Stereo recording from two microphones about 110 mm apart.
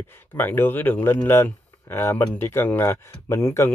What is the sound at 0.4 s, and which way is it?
Speech, 20° left (ahead or behind).